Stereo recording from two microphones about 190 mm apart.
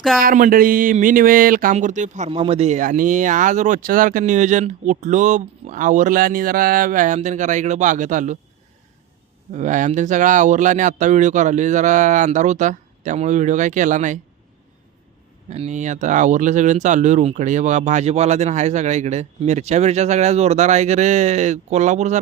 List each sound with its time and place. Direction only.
0.2 s speech: 45° right (ahead or behind)
9.5 s speech: 40° right (ahead or behind)
15.4 s speech: 35° right (ahead or behind)